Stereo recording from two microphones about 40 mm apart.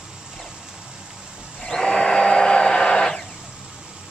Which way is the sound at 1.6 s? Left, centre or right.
Centre.